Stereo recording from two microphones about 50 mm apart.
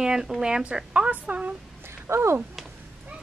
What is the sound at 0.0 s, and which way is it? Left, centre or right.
Speech, centre.